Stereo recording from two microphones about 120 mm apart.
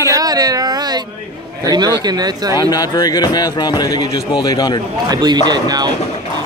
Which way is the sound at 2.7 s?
35° left (ahead or behind).